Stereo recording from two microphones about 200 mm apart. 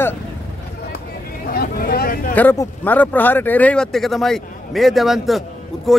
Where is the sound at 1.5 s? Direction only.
50° left (ahead or behind).